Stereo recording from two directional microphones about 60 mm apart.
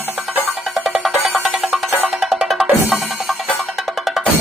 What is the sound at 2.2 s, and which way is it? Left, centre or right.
Music, centre.